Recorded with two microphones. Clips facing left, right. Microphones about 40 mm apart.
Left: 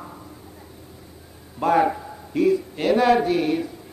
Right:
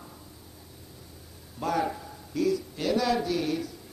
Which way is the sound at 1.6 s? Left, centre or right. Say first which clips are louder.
Left 9 dB; left.